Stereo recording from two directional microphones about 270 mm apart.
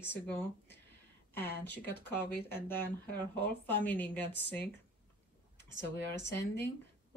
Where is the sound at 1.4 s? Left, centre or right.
Left.